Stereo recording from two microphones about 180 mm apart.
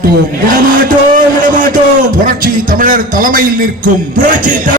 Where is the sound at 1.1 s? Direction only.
45° right (ahead or behind).